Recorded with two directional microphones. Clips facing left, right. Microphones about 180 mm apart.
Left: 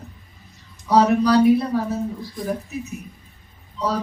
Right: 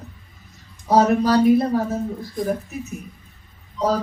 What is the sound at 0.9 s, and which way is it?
A woman's voice, 45° right (ahead or behind).